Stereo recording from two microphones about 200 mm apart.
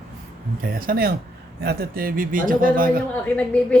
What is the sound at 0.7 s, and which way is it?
A man's voice, 50° right (ahead or behind).